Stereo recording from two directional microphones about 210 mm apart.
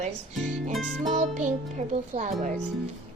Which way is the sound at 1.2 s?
35° right (ahead or behind).